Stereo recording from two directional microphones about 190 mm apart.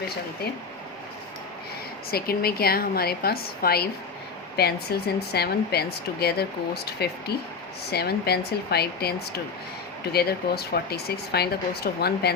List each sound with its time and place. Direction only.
2.0 s a woman's voice: 55° left (ahead or behind)